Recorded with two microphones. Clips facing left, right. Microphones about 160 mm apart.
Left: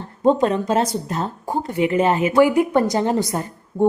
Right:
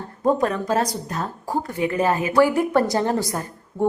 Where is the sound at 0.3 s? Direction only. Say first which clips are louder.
Left 3 dB; 25° left (ahead or behind).